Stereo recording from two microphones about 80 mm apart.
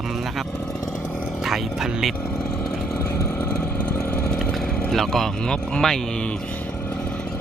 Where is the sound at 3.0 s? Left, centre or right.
Left.